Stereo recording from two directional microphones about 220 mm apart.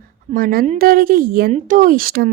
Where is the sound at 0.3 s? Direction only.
40° right (ahead or behind).